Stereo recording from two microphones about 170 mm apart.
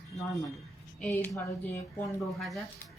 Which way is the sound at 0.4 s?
Centre (ahead or behind).